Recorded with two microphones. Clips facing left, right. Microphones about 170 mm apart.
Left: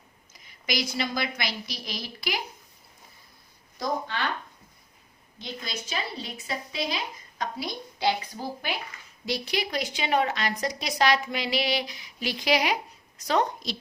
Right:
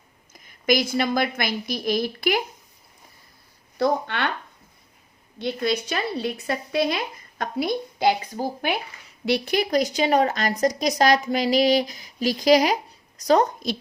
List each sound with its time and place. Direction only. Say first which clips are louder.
0.3 s a woman's voice: right 9 dB; 50° right (ahead or behind)
3.8 s a woman's voice: right 7 dB; 65° right (ahead or behind)
5.4 s a woman's voice: right 13 dB; 60° right (ahead or behind)